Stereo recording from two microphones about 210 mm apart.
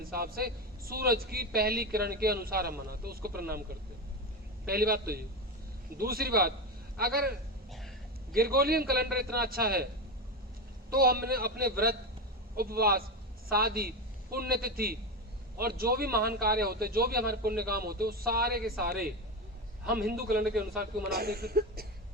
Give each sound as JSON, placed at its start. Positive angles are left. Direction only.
{"t": 0.0, "sound": "a man's voice", "side_deg": -45}
{"t": 4.6, "sound": "a man's voice", "side_deg": -45}
{"t": 7.7, "sound": "hiccup", "side_deg": 0}
{"t": 8.3, "sound": "a man's voice", "side_deg": -45}